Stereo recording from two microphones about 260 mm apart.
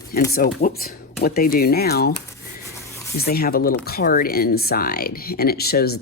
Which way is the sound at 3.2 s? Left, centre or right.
Left.